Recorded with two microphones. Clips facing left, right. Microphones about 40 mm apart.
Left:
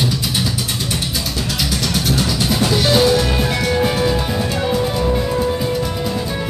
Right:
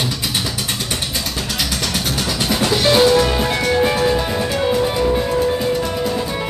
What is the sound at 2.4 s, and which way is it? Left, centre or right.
Music, centre.